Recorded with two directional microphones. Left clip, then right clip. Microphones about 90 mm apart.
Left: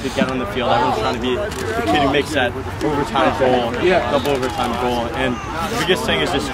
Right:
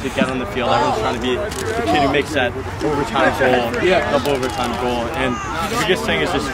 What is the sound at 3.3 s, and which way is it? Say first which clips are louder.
Speech: right 1 dB; 35° right (ahead or behind).